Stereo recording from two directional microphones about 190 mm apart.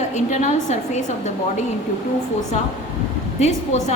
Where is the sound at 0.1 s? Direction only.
35° left (ahead or behind).